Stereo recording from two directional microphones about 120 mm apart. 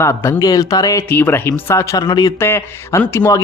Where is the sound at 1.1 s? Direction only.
20° left (ahead or behind).